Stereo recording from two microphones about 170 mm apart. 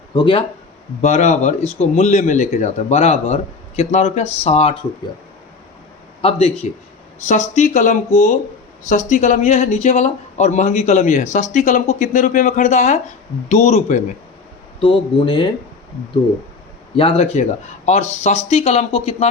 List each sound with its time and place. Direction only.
0.1 s speech: 30° left (ahead or behind)
1.0 s a man's voice: 45° left (ahead or behind)
6.2 s a man's voice: 35° left (ahead or behind)
14.8 s speech: 30° left (ahead or behind)
17.0 s a man's voice: 35° left (ahead or behind)